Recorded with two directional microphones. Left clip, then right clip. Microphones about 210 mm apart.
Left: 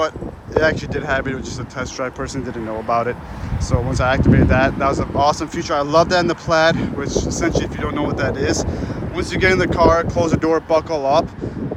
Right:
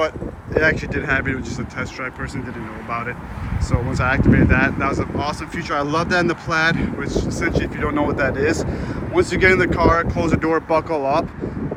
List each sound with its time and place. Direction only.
0.5 s speech: 5° left (ahead or behind)
2.9 s speech: 15° left (ahead or behind)
7.8 s speech: centre (ahead or behind)